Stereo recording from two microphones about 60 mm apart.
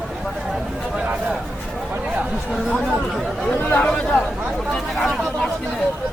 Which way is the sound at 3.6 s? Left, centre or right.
Left.